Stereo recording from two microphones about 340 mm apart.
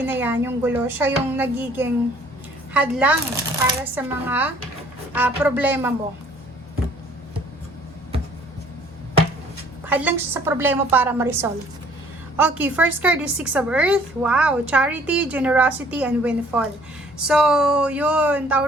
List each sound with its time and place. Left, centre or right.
0.0 s a woman's voice: centre
9.8 s a woman's voice: centre